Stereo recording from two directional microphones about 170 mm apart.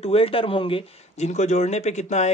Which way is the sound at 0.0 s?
35° left (ahead or behind).